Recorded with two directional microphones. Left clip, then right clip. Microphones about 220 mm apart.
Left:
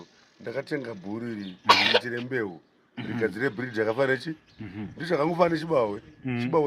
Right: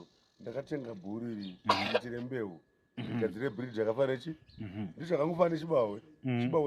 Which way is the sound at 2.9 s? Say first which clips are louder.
Left 6 dB; 55° right (ahead or behind).